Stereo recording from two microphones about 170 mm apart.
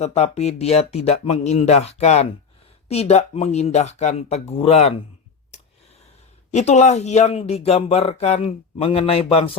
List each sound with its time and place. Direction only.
0.0 s speech: 40° left (ahead or behind)
6.5 s speech: 40° left (ahead or behind)